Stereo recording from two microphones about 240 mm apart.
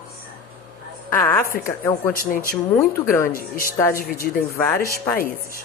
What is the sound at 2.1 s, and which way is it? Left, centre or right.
Speech, left.